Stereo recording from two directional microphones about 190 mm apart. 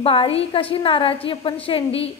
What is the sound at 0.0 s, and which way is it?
A woman's voice, 30° left (ahead or behind).